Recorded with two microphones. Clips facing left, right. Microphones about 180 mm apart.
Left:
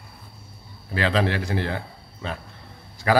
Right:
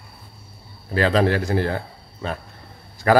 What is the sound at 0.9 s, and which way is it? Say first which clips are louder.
A man's voice: right 4 dB; 45° right (ahead or behind).